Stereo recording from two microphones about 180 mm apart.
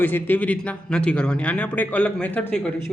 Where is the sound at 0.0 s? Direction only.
10° left (ahead or behind).